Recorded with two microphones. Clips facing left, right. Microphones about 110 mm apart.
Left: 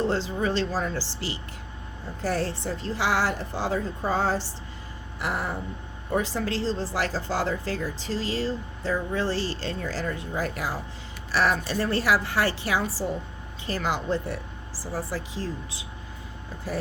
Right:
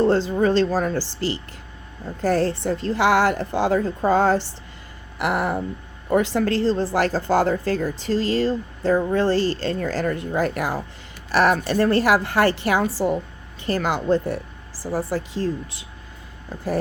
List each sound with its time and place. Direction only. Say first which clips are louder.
0.0 s a woman's voice: right 8 dB; 50° right (ahead or behind)
5.2 s a sound: right 7 dB; 65° right (ahead or behind)
6.1 s a woman's voice: right 7 dB; 70° right (ahead or behind); by 15.9 s 55° right (ahead or behind)